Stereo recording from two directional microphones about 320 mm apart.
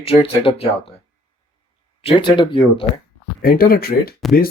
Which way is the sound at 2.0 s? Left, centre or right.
Centre.